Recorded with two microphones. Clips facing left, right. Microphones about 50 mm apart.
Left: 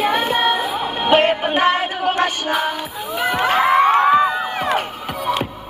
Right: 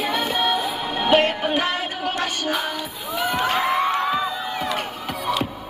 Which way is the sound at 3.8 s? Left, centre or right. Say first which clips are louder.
Left 8 dB; left.